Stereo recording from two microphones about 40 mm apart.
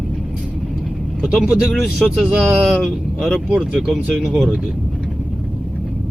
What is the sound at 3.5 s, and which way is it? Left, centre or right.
Speech, right.